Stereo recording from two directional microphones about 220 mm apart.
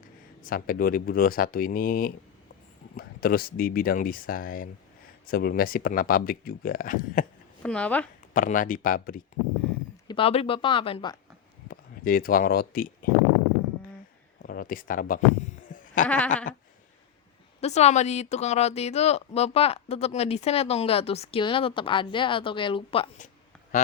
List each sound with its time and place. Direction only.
0.4 s speech: 40° left (ahead or behind)
7.6 s speech: 5° left (ahead or behind)
8.3 s speech: 40° left (ahead or behind)
10.1 s speech: 25° left (ahead or behind)
11.7 s speech: 40° left (ahead or behind)
14.4 s a sound: 40° left (ahead or behind)
16.0 s speech: 5° left (ahead or behind)
17.6 s speech: 30° left (ahead or behind)